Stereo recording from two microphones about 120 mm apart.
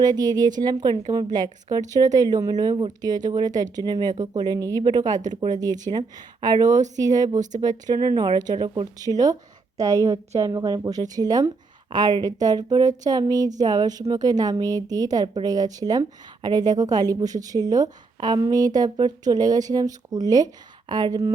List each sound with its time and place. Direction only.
0.0 s a woman's voice: 35° right (ahead or behind)